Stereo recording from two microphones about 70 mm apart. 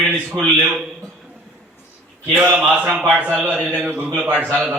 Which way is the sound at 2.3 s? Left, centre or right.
Right.